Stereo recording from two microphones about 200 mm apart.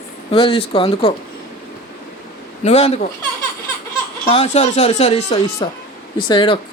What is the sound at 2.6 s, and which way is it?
Speech, 35° left (ahead or behind).